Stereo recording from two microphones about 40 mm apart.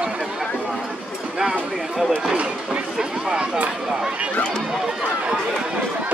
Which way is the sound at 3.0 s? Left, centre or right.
Centre.